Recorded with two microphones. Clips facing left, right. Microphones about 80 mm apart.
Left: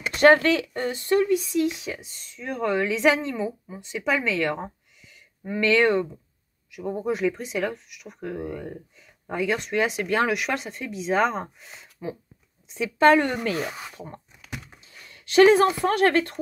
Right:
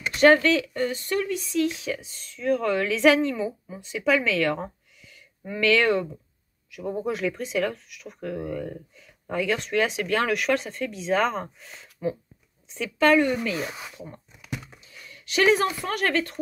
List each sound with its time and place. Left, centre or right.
0.2 s speech: left
2.0 s speech: centre
12.8 s a woman's voice: left
13.2 s speech: left